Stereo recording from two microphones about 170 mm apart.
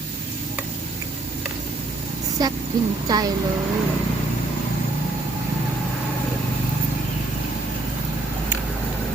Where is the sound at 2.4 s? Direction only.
25° right (ahead or behind).